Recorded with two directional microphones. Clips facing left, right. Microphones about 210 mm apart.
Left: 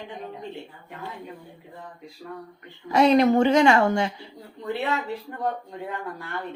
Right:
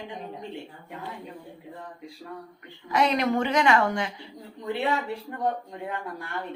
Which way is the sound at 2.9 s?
30° left (ahead or behind).